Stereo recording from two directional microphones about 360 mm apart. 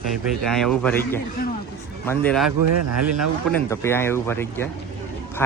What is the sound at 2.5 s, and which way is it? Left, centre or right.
Speech, right.